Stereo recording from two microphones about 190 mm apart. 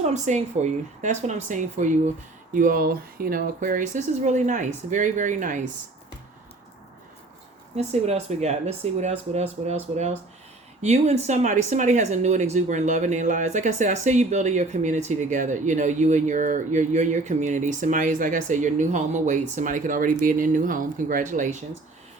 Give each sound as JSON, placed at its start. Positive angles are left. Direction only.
{"t": 0.0, "sound": "speech", "side_deg": -40}
{"t": 7.8, "sound": "speech", "side_deg": -35}